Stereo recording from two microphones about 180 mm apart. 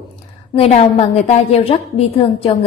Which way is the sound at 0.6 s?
35° left (ahead or behind).